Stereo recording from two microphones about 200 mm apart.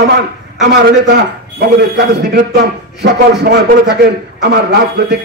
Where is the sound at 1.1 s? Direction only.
55° right (ahead or behind).